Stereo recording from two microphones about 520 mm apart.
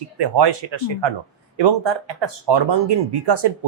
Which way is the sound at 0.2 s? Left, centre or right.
Right.